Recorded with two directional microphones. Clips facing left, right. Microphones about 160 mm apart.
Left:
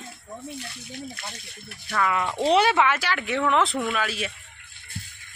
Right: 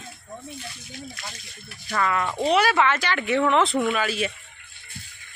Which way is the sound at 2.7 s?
10° left (ahead or behind).